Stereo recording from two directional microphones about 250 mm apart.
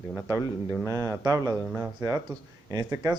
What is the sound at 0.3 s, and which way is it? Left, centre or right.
Speech, centre.